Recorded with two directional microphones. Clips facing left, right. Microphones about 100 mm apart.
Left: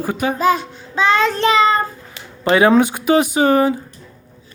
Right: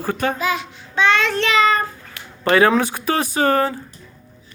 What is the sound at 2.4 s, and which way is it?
Speech, 20° left (ahead or behind).